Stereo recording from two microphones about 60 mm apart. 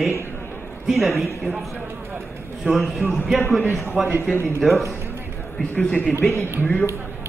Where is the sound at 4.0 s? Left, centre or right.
Right.